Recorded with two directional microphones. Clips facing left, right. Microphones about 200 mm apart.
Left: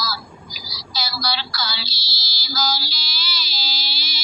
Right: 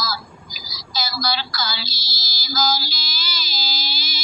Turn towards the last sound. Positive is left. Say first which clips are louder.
# right 3 dB
turn(degrees=-45)  # may be behind; listen again after turning